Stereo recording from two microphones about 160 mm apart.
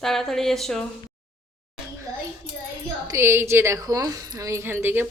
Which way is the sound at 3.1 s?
15° right (ahead or behind).